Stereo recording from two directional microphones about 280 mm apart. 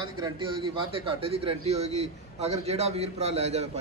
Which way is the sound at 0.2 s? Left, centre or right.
Centre.